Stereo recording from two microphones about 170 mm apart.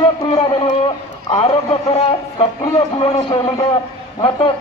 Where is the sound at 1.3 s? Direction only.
35° left (ahead or behind).